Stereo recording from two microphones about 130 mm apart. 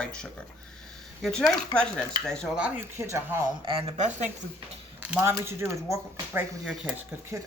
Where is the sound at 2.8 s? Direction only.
20° right (ahead or behind).